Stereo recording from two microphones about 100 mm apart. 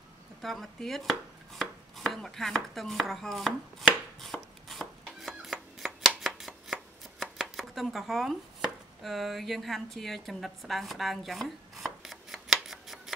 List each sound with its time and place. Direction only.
0.4 s chopping: 5° left (ahead or behind)